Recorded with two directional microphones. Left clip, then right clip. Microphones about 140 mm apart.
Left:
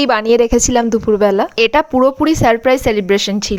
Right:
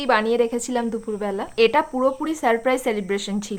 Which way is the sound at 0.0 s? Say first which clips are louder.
Left 7 dB; 55° left (ahead or behind).